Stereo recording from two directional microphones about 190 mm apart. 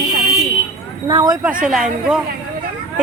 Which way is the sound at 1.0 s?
20° right (ahead or behind).